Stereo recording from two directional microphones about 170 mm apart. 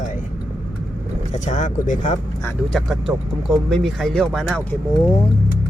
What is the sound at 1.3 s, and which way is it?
Speech, 45° left (ahead or behind).